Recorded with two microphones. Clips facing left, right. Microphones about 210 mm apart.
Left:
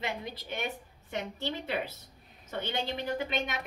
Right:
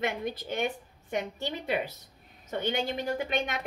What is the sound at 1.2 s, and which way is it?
Speech, 15° right (ahead or behind).